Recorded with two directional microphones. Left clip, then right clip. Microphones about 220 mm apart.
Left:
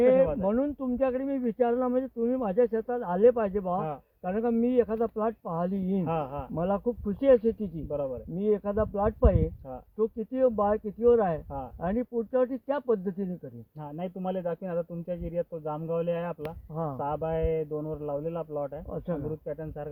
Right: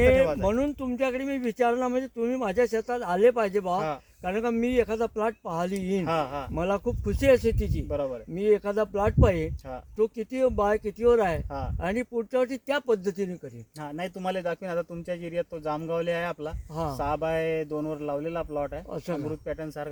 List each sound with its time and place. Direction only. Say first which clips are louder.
0.0 s a sound: right 1 dB; 25° right (ahead or behind)
0.4 s speech: right 2 dB; 25° right (ahead or behind)
6.1 s speech: right 4 dB; 5° right (ahead or behind)
6.5 s speech: left 2 dB; 25° right (ahead or behind)
7.9 s speech: right 1 dB; 5° right (ahead or behind)
8.4 s speech: right 3 dB; 20° right (ahead or behind)
13.9 s speech: right 2 dB; 5° right (ahead or behind)
18.9 s speech: right 1 dB; 30° right (ahead or behind)
19.5 s speech: right 3 dB; centre (ahead or behind)